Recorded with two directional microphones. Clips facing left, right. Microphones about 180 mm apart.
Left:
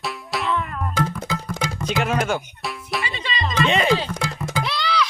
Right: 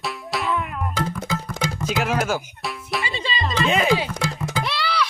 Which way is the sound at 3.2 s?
30° right (ahead or behind).